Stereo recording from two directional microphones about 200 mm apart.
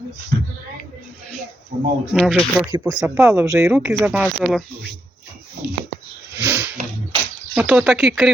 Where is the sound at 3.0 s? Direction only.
10° right (ahead or behind).